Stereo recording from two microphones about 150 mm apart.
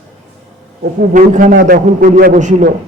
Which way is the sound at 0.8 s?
65° right (ahead or behind).